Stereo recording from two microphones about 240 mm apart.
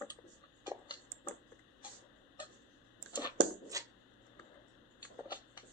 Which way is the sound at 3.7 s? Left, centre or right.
Centre.